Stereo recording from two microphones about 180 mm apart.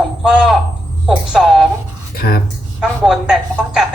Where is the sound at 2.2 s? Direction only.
55° left (ahead or behind).